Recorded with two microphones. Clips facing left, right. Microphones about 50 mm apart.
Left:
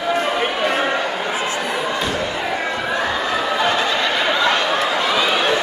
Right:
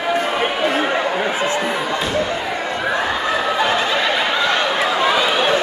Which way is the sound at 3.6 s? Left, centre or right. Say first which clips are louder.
Even; centre.